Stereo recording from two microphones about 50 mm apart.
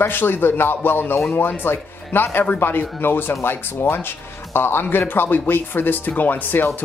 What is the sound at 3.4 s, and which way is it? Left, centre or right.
Speech, left.